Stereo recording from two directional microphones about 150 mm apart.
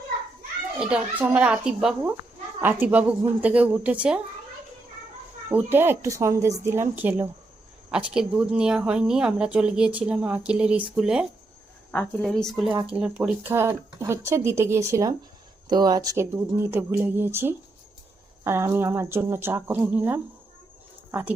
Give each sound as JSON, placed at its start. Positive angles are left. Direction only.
{"t": 0.8, "sound": "speech", "side_deg": -10}
{"t": 5.5, "sound": "speech", "side_deg": -15}
{"t": 11.9, "sound": "speech", "side_deg": 5}